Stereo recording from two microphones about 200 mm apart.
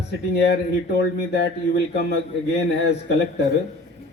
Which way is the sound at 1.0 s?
55° left (ahead or behind).